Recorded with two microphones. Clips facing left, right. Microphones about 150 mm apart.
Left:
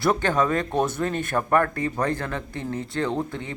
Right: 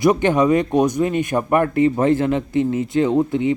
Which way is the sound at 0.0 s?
20° right (ahead or behind).